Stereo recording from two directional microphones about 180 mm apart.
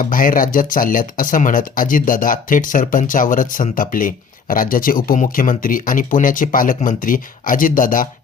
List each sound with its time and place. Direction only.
0.0 s speech: 50° left (ahead or behind)